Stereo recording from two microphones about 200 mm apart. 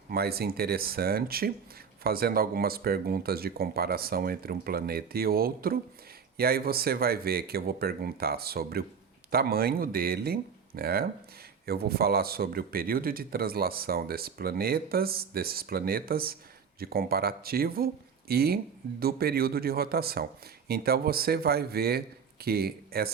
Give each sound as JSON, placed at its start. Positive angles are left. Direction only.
{"t": 0.1, "sound": "speech", "side_deg": -50}